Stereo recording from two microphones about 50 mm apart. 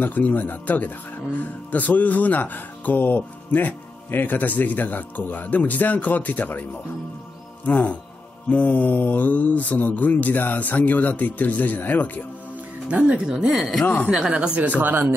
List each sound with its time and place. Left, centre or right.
0.0 s speech: left
7.6 s music: left
8.5 s speech: left
13.0 s speech: centre
13.5 s speech: centre
13.8 s speech: left
14.1 s speech: centre
14.6 s speech: right